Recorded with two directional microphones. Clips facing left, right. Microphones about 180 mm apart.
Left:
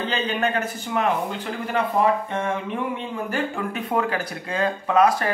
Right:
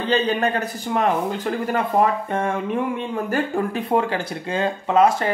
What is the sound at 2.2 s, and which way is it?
Music, 45° right (ahead or behind).